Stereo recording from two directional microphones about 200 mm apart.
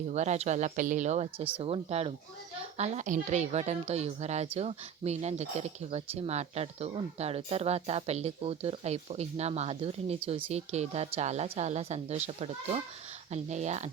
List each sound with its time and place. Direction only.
0.1 s speech: 35° right (ahead or behind)